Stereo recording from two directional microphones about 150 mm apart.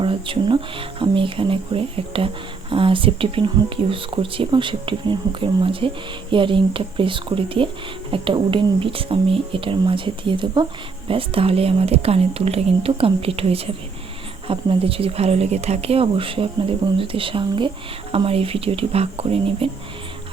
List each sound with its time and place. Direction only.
0.0 s speech: 35° right (ahead or behind)